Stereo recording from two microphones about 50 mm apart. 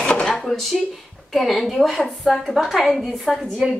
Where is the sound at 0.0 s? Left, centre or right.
Centre.